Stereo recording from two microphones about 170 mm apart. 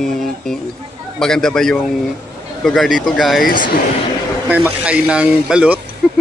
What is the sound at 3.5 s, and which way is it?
Speech, 55° left (ahead or behind).